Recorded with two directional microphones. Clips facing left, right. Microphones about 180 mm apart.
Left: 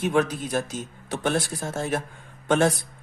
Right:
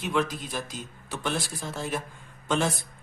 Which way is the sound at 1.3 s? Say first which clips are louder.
Left 5 dB; 50° left (ahead or behind).